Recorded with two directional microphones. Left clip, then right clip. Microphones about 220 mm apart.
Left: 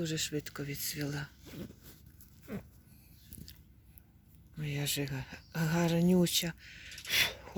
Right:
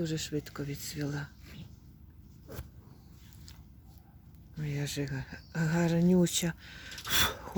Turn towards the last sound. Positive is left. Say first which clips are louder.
# right 1 dB
turn(degrees=-30)  # may be behind; listen again after turning